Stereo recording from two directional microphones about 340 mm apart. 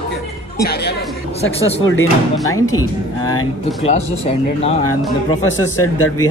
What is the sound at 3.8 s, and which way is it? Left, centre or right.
Speech, centre.